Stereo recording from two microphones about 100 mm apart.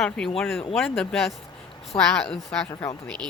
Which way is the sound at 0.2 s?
5° left (ahead or behind).